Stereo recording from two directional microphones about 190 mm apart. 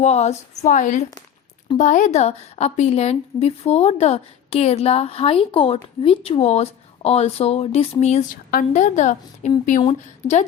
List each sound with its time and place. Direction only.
0.0 s speech: 35° left (ahead or behind)
8.4 s speech: 45° left (ahead or behind)